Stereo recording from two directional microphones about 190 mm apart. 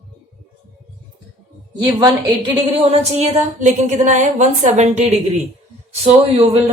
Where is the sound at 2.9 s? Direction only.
35° right (ahead or behind).